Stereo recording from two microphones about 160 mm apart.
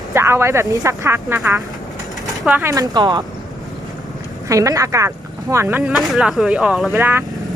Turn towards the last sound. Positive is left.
turn(degrees=-15)  # may be behind; listen again after turning